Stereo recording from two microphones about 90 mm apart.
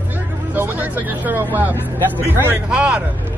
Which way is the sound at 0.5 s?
20° right (ahead or behind).